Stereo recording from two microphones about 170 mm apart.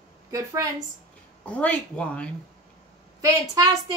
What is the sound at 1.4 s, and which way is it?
Speech, 5° left (ahead or behind).